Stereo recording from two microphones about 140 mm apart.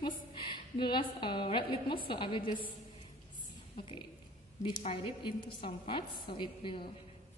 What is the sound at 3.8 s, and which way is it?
A woman's voice, 35° left (ahead or behind).